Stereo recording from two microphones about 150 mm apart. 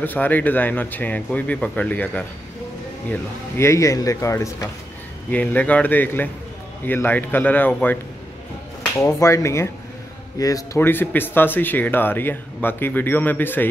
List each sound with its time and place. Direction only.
0.0 s speech: 10° left (ahead or behind)
5.3 s speech: 10° left (ahead or behind)
9.2 s speech: 20° left (ahead or behind)